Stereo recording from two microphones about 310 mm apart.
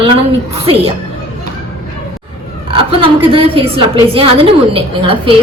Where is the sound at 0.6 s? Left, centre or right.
Centre.